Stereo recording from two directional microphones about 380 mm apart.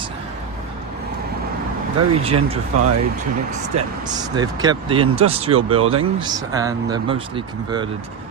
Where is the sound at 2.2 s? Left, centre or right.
Centre.